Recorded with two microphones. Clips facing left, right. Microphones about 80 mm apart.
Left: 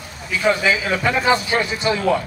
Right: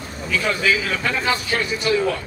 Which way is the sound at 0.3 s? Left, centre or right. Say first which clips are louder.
Left 3 dB; centre.